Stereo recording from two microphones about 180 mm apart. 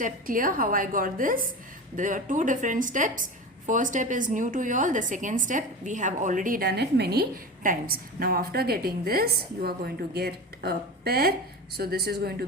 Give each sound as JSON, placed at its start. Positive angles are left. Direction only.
{"t": 0.0, "sound": "a woman's voice", "side_deg": -50}